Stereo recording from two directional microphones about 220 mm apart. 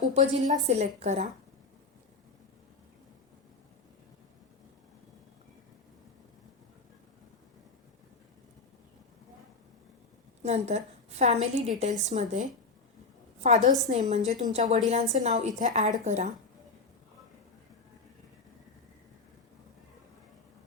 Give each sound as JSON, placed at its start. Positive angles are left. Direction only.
{"t": 0.0, "sound": "a woman's voice", "side_deg": -30}
{"t": 10.4, "sound": "a woman's voice", "side_deg": -30}
{"t": 13.4, "sound": "a woman's voice", "side_deg": -30}